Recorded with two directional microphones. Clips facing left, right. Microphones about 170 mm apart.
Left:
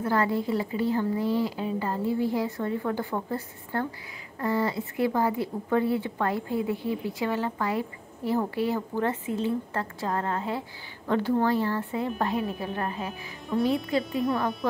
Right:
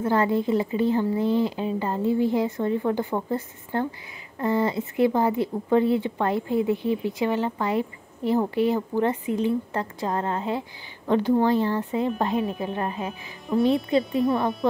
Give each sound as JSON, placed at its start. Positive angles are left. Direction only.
{"t": 0.0, "sound": "speech", "side_deg": -20}